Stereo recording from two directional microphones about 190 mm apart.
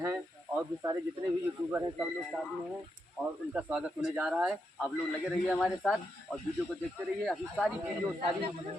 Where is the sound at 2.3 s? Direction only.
10° right (ahead or behind).